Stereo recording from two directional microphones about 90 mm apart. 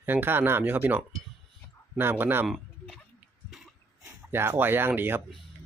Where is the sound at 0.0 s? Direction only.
25° right (ahead or behind).